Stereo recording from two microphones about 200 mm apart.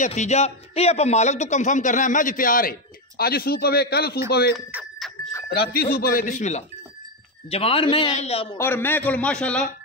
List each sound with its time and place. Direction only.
0.0 s speech: 35° left (ahead or behind); by 4.6 s 50° left (ahead or behind)
4.6 s livestock: 5° right (ahead or behind)
5.5 s speech: 50° left (ahead or behind); by 8.5 s 30° left (ahead or behind)
8.5 s a man's voice: 10° left (ahead or behind)